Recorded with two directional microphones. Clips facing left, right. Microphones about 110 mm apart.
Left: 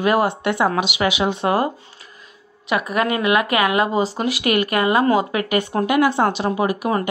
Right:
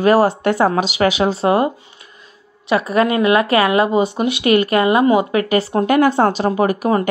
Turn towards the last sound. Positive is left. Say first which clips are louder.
# right 4 dB
turn(degrees=-45)  # may be behind; listen again after turning